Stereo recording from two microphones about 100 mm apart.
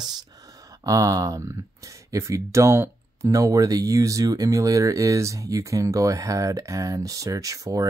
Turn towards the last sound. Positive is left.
turn(degrees=-35)  # may be behind; listen again after turning